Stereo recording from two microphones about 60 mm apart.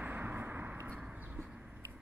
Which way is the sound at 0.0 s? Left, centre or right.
Right.